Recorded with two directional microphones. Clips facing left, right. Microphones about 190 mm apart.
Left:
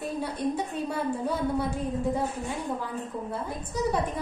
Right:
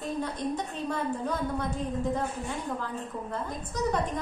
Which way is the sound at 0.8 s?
10° left (ahead or behind).